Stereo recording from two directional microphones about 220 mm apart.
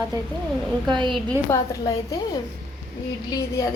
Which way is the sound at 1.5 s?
15° left (ahead or behind).